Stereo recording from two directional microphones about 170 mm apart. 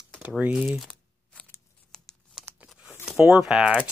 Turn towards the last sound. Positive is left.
turn(degrees=-5)  # may be behind; listen again after turning